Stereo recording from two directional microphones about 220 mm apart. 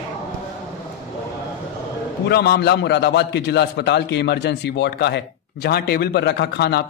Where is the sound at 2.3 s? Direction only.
50° left (ahead or behind).